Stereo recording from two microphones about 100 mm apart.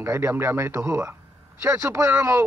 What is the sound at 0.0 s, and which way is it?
A man's voice, 25° right (ahead or behind).